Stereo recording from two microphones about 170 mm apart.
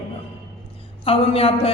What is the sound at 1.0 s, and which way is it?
Speech, 35° left (ahead or behind).